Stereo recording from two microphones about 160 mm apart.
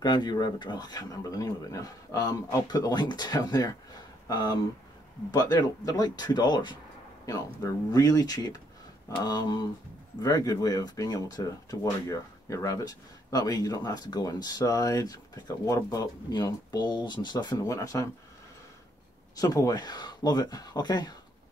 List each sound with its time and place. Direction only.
0.0 s speech: 25° left (ahead or behind)
19.3 s speech: 20° left (ahead or behind)